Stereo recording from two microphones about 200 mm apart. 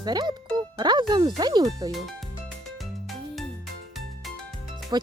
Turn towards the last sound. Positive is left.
turn(degrees=-20)  # may be behind; listen again after turning